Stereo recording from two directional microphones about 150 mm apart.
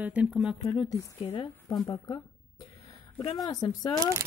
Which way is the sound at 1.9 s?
30° left (ahead or behind).